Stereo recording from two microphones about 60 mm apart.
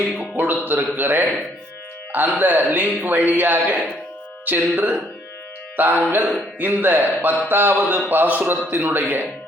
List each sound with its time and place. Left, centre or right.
0.2 s a man's voice: right
2.4 s a man's voice: right
5.7 s music: right
6.1 s a man's voice: right